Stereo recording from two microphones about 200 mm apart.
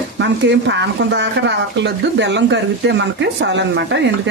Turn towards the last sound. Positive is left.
turn(degrees=-60)  # may be behind; listen again after turning